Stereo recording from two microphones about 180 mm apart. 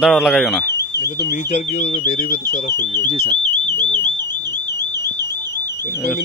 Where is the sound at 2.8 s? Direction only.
25° right (ahead or behind).